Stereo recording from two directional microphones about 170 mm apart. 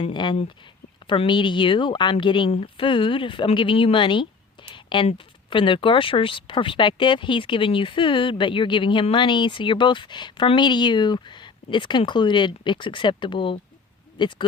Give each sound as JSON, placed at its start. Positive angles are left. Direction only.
{"t": 0.0, "sound": "speech", "side_deg": 25}